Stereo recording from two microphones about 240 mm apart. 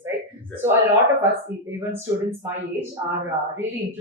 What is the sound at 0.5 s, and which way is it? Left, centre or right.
A man's voice, centre.